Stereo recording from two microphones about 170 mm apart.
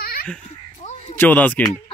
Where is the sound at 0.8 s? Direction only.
45° left (ahead or behind).